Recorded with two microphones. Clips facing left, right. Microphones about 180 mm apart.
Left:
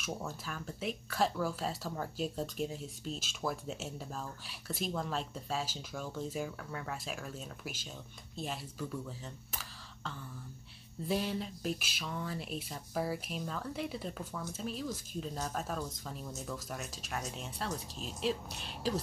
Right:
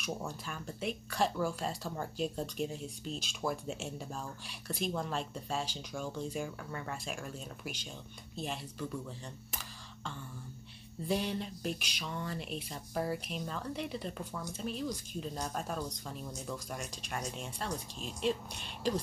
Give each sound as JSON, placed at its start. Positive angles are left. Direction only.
{"t": 0.5, "sound": "speech", "side_deg": 0}
{"t": 9.5, "sound": "a sound", "side_deg": 0}
{"t": 11.1, "sound": "speech", "side_deg": 0}